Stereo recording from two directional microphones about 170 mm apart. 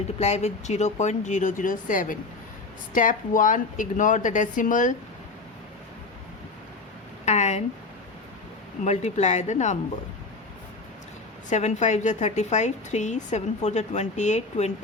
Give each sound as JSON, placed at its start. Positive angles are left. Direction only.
{"t": 0.2, "sound": "speech", "side_deg": 40}
{"t": 7.3, "sound": "a sound", "side_deg": 40}
{"t": 8.8, "sound": "speech", "side_deg": 40}
{"t": 11.4, "sound": "speech", "side_deg": 45}